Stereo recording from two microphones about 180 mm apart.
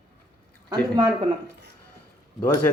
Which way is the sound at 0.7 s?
20° right (ahead or behind).